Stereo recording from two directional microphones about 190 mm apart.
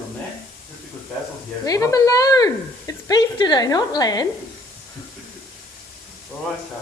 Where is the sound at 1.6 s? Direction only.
15° left (ahead or behind).